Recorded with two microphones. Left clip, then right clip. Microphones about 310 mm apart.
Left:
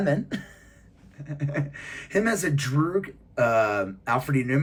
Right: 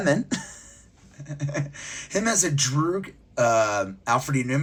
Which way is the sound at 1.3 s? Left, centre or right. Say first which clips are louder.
Even; centre.